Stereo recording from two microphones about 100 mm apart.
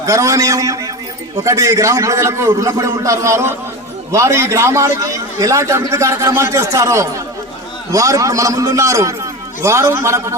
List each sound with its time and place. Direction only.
0.0 s a man's voice: 35° right (ahead or behind)